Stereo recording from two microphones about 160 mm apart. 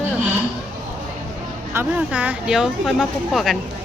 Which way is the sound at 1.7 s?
10° right (ahead or behind).